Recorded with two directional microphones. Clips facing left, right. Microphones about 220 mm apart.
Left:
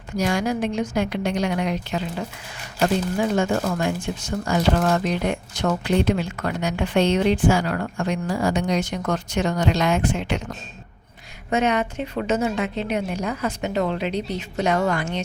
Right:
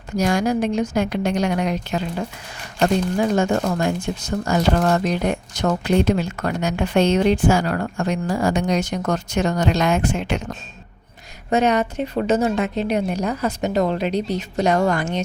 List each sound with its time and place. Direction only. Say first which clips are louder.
0.2 s speech: right 3 dB; 45° right (ahead or behind)
3.2 s a woman's voice: right 2 dB; 40° right (ahead or behind)
11.5 s a woman's voice: right 3 dB; 40° right (ahead or behind)